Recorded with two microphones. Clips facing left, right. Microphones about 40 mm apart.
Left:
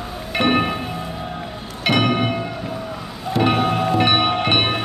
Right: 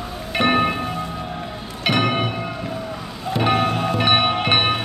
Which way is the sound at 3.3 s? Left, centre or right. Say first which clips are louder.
Left 1 dB; centre.